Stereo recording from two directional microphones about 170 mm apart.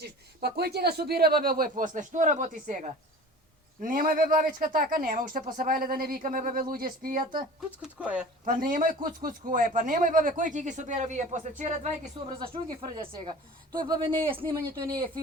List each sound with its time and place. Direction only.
0.0 s speech: 70° right (ahead or behind)
7.8 s speech: 5° right (ahead or behind)
8.4 s speech: 55° right (ahead or behind)
12.4 s speech: 25° right (ahead or behind)